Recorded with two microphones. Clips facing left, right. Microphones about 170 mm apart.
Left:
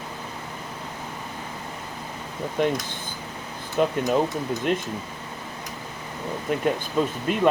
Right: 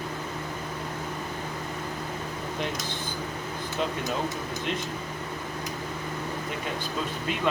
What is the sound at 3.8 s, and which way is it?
Speech, 50° left (ahead or behind).